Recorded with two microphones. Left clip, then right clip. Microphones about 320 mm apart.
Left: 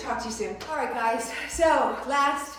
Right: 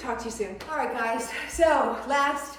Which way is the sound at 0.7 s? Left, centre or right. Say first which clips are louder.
Left 1 dB; centre.